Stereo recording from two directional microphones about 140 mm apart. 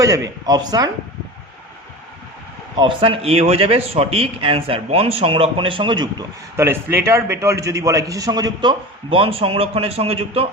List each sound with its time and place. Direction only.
0.0 s a man's voice: 25° right (ahead or behind)
2.7 s a man's voice: 35° right (ahead or behind)
6.6 s a man's voice: 15° right (ahead or behind); by 10.5 s 45° right (ahead or behind)